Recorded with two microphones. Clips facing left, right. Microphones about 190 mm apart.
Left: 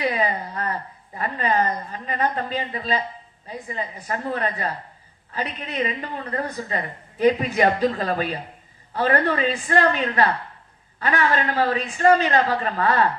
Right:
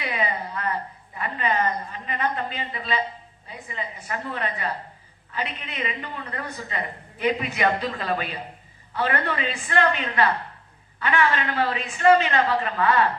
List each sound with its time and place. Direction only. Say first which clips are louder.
0.0 s a woman's voice: left 4 dB; 40° left (ahead or behind)